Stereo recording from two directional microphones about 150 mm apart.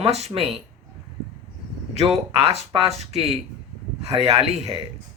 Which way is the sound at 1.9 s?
45° right (ahead or behind).